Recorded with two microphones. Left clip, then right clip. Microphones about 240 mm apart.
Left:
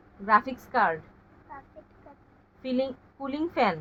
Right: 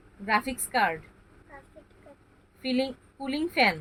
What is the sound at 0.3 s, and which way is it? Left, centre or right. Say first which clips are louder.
Speech: left 4 dB; centre.